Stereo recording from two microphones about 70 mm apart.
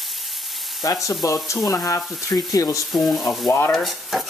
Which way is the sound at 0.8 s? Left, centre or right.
Left.